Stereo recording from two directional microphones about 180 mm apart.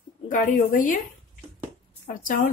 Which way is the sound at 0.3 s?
50° left (ahead or behind).